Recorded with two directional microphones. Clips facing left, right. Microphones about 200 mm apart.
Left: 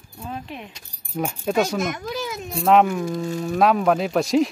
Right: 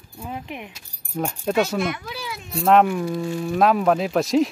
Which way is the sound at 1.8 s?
45° left (ahead or behind).